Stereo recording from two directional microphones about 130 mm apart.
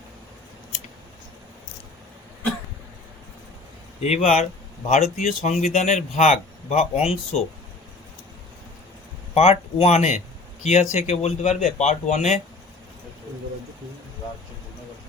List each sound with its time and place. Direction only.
4.0 s speech: 55° left (ahead or behind)
9.3 s speech: 50° left (ahead or behind)